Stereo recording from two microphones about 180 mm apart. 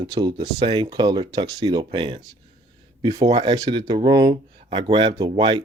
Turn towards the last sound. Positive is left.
turn(degrees=-25)  # may be behind; listen again after turning